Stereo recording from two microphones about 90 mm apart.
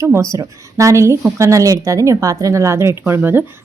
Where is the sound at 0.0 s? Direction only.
30° right (ahead or behind).